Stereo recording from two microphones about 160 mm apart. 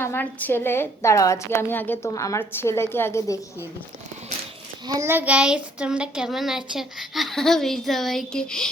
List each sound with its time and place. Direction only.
0.0 s a woman's voice: 10° left (ahead or behind)
4.9 s a child's voice: 20° right (ahead or behind); by 8.7 s 5° left (ahead or behind)